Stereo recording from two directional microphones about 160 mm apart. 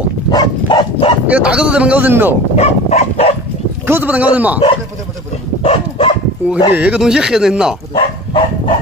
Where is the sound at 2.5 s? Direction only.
40° left (ahead or behind).